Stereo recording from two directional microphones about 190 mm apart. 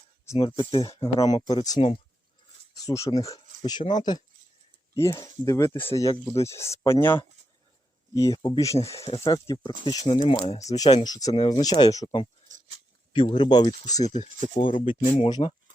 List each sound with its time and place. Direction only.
0.3 s speech: 30° left (ahead or behind)
2.7 s speech: 15° left (ahead or behind)
12.5 s a sound: 35° right (ahead or behind)
13.1 s speech: 25° left (ahead or behind)
14.0 s speech: 35° left (ahead or behind)
15.1 s speech: 25° left (ahead or behind)